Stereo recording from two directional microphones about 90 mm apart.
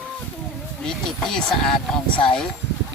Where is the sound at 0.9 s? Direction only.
5° left (ahead or behind).